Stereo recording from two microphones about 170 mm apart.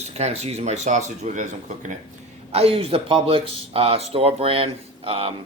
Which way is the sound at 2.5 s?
35° right (ahead or behind).